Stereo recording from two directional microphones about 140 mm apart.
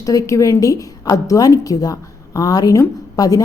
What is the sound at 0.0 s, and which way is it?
A woman's voice, 25° left (ahead or behind).